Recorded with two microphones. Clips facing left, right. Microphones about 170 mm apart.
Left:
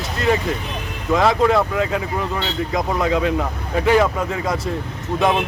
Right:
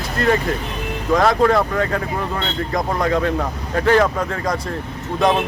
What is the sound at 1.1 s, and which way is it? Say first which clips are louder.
Speech: right 1 dB; 5° left (ahead or behind).